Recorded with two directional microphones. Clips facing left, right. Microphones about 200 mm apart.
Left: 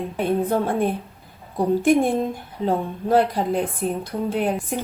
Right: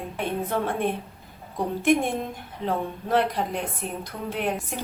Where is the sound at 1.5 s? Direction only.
35° left (ahead or behind).